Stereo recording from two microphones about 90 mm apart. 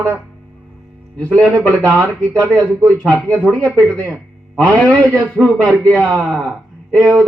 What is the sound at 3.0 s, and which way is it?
A man's voice, 15° left (ahead or behind).